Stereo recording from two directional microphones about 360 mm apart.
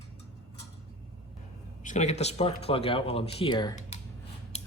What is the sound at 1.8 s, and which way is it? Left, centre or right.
Speech, centre.